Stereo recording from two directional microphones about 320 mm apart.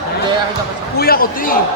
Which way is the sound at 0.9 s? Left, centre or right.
Left.